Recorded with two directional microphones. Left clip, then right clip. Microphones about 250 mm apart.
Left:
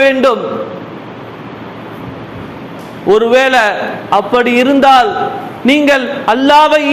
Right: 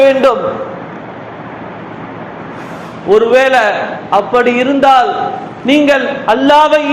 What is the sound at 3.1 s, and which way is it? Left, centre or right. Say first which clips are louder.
A man's voice: even; left.